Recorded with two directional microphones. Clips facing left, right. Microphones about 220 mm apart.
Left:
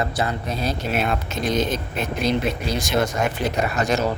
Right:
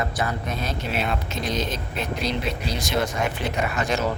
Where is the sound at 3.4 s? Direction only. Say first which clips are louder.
Left 3 dB; 40° left (ahead or behind).